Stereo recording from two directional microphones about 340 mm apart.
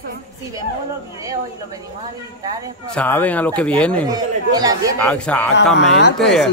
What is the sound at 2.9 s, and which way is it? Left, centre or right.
Speech, centre.